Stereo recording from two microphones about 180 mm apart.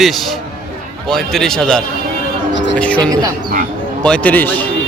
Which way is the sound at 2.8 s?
5° left (ahead or behind).